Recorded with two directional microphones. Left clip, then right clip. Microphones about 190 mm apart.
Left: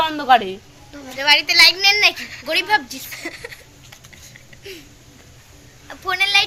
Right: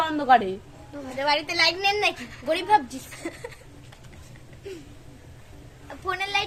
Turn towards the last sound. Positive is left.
turn(degrees=0)  # may be behind; listen again after turning